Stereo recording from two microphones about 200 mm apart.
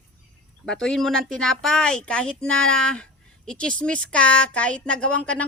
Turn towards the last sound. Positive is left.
turn(degrees=5)  # may be behind; listen again after turning